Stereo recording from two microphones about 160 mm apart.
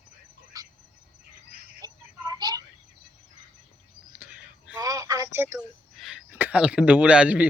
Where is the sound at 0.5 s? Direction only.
20° right (ahead or behind).